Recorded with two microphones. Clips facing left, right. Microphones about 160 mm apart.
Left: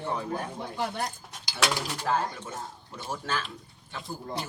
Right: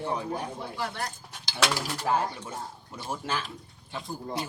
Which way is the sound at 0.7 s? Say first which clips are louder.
Left 4 dB; 25° left (ahead or behind).